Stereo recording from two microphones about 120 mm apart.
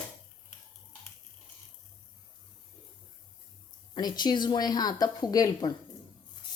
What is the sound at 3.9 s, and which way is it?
A woman's voice, 35° left (ahead or behind).